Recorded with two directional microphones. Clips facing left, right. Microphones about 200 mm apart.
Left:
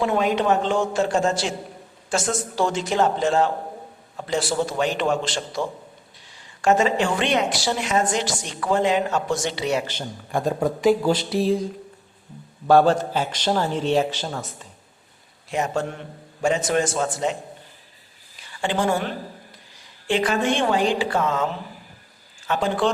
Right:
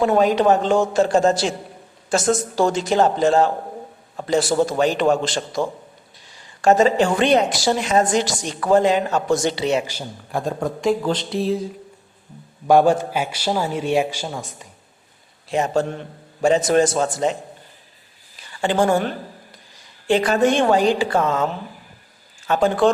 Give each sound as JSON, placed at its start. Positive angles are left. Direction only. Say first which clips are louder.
{"t": 0.0, "sound": "a woman's voice", "louder": "right 5 dB", "side_deg": -40}
{"t": 9.8, "sound": "a man's voice", "louder": "even", "side_deg": -5}
{"t": 12.6, "sound": "a man's voice", "louder": "right 1 dB", "side_deg": -15}
{"t": 15.4, "sound": "a woman's voice", "louder": "right 4 dB", "side_deg": -30}
{"t": 18.6, "sound": "a woman's voice", "louder": "right 5 dB", "side_deg": -40}
{"t": 20.1, "sound": "a woman's voice", "louder": "right 5 dB", "side_deg": -40}
{"t": 22.4, "sound": "a man's voice", "louder": "right 5 dB", "side_deg": -45}